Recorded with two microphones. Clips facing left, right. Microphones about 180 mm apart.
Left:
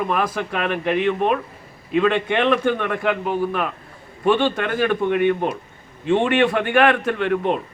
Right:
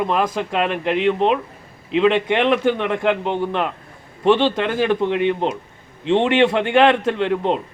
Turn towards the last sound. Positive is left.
turn(degrees=-20)  # may be behind; listen again after turning